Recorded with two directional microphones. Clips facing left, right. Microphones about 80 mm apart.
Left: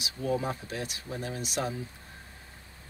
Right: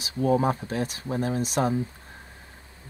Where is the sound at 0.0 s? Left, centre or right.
Right.